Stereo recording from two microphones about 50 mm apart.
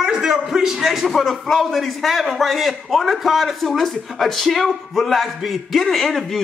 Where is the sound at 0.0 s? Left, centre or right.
Centre.